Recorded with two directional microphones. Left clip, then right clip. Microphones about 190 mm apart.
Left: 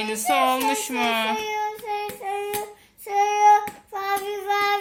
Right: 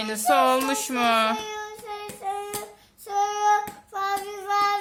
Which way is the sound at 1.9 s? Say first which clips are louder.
Left 4 dB; 5° left (ahead or behind).